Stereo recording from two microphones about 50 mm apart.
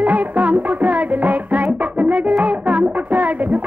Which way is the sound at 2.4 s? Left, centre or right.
Right.